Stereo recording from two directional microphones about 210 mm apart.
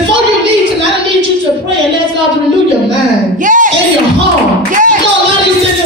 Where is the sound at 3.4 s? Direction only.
40° right (ahead or behind).